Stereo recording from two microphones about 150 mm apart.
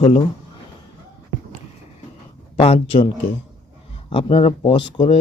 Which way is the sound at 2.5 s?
40° left (ahead or behind).